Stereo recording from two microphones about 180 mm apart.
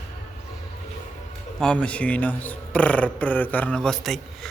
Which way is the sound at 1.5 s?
5° left (ahead or behind).